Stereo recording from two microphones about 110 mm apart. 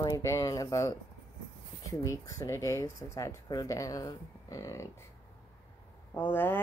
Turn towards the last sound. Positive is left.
turn(degrees=20)  # may be behind; listen again after turning